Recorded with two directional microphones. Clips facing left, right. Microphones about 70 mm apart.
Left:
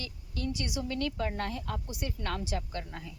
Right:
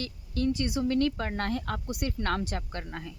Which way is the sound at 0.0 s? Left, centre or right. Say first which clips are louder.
Right 7 dB; right.